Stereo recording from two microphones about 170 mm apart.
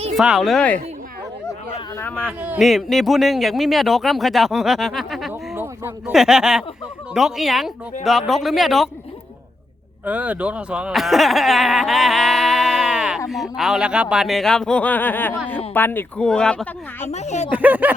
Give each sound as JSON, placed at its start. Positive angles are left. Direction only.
{"t": 0.2, "sound": "speech", "side_deg": 0}
{"t": 2.0, "sound": "speech", "side_deg": 10}
{"t": 2.4, "sound": "speech", "side_deg": -5}
{"t": 5.3, "sound": "a sound", "side_deg": -10}
{"t": 6.1, "sound": "speech", "side_deg": 0}
{"t": 10.1, "sound": "speech", "side_deg": -10}
{"t": 17.1, "sound": "speech", "side_deg": 40}
{"t": 17.5, "sound": "speech", "side_deg": -10}